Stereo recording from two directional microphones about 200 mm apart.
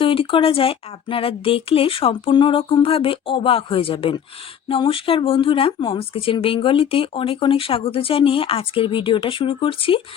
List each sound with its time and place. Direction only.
0.0 s speech: 25° left (ahead or behind)